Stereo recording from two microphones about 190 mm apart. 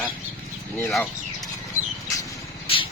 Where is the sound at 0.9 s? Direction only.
Centre (ahead or behind).